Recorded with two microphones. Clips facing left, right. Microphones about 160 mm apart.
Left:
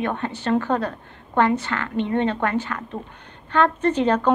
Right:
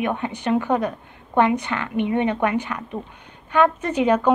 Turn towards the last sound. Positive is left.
turn(degrees=-10)  # may be behind; listen again after turning